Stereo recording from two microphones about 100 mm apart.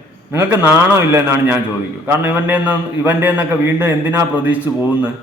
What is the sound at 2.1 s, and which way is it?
A man's voice, 15° right (ahead or behind).